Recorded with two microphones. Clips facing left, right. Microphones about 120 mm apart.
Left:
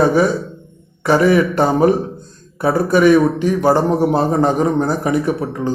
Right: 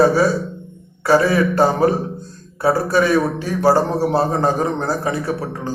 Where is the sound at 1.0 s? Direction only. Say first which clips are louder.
Left 2 dB; 20° left (ahead or behind).